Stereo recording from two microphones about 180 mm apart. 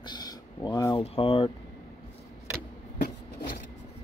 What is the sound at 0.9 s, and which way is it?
Speech, 30° left (ahead or behind).